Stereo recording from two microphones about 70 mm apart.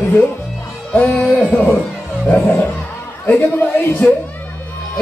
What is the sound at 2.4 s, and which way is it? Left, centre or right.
Music, left.